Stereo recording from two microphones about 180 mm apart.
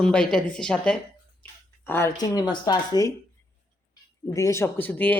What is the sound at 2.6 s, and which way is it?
Speech, 20° left (ahead or behind).